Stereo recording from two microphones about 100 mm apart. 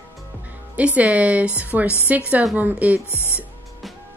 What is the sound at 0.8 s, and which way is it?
Speech, 15° right (ahead or behind).